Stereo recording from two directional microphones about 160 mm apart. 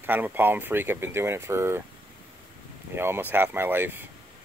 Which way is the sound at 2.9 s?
15° right (ahead or behind).